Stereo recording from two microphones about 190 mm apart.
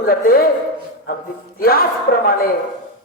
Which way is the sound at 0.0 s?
50° left (ahead or behind).